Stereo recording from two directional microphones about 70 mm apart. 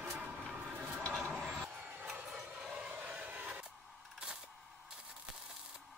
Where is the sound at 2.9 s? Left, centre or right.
Centre.